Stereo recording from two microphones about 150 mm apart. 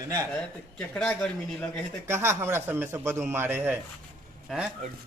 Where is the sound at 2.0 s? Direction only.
20° right (ahead or behind).